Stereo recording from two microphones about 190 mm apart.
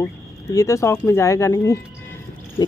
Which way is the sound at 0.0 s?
15° left (ahead or behind).